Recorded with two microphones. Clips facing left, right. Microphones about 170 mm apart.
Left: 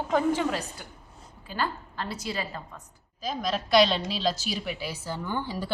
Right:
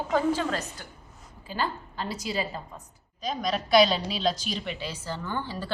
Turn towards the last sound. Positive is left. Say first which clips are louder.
# left 2 dB
turn(degrees=15)  # may be behind; listen again after turning